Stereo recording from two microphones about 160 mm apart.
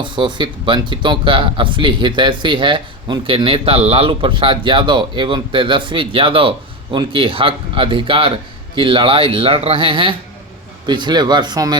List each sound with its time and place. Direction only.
0.0 s speech: 30° right (ahead or behind)